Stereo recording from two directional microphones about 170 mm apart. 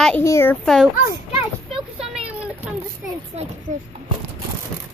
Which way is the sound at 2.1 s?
10° right (ahead or behind).